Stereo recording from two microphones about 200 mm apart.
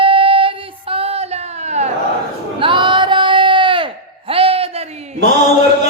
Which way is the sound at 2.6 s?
25° right (ahead or behind).